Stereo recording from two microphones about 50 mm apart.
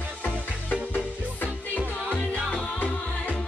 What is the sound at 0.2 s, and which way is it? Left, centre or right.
Music, left.